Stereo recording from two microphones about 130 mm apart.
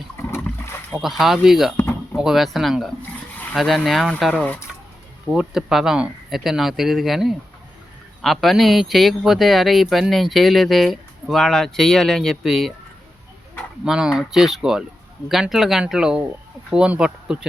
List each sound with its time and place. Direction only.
0.3 s boat: 20° left (ahead or behind)
0.9 s a man's voice: centre (ahead or behind)
1.7 s a sound: 20° left (ahead or behind)
2.1 s a man's voice: centre (ahead or behind)
13.8 s a man's voice: 5° right (ahead or behind)